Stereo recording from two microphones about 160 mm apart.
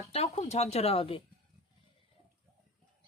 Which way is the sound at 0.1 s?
40° left (ahead or behind).